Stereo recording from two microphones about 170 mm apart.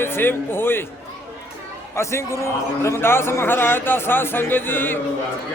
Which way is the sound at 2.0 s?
15° left (ahead or behind).